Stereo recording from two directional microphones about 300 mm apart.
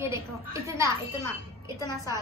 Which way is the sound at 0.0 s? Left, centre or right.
Centre.